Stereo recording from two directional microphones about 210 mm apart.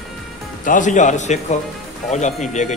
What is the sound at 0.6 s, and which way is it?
A man's voice, 35° left (ahead or behind).